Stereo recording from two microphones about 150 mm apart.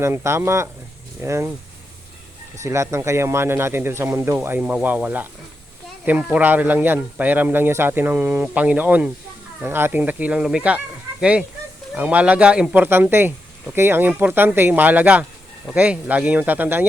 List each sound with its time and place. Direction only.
0.0 s speech: 15° right (ahead or behind)
2.6 s speech: 20° right (ahead or behind)
6.3 s speech: 10° right (ahead or behind)